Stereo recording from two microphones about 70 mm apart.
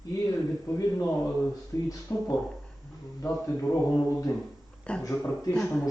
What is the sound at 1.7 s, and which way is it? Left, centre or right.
Speech, left.